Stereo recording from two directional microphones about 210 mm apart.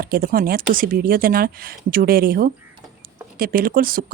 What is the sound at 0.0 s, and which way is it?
A woman's voice, 45° right (ahead or behind).